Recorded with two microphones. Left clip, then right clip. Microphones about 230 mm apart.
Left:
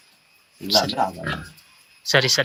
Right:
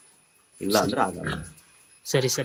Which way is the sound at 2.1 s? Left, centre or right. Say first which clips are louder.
Left 7 dB; centre.